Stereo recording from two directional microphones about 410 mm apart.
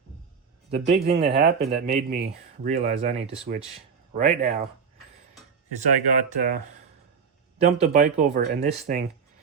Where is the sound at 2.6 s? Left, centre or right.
Centre.